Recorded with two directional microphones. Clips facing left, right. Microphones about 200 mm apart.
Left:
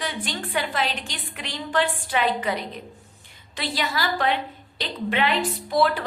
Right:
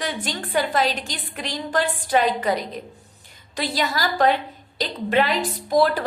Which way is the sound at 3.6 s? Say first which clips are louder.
Right 3 dB; 40° right (ahead or behind).